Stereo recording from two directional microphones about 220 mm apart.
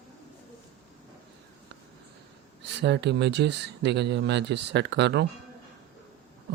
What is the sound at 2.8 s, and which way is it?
Speech, 50° right (ahead or behind).